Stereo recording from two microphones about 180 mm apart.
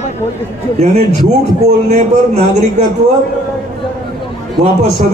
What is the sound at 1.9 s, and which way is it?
Speech, 40° right (ahead or behind).